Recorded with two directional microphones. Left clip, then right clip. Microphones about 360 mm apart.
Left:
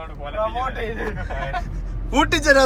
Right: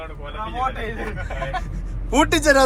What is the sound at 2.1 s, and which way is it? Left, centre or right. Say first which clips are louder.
Speech: even; centre.